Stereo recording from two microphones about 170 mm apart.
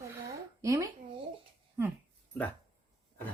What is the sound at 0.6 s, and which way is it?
Speech, 20° right (ahead or behind).